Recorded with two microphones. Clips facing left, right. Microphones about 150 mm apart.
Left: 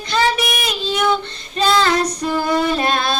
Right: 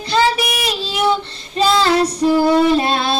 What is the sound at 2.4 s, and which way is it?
Music, 25° right (ahead or behind).